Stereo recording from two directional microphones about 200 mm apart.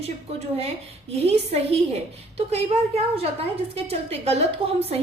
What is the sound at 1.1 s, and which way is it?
A woman's voice, 30° right (ahead or behind).